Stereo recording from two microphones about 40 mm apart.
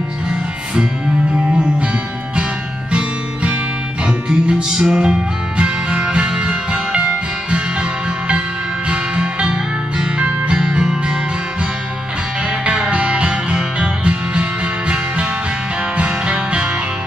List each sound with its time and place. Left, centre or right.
4.3 s music: right
8.8 s music: right
12.6 s music: right